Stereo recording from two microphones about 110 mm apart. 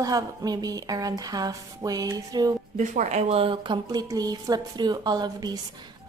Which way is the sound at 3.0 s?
90° right.